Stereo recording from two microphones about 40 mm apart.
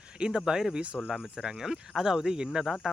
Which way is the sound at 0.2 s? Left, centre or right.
Right.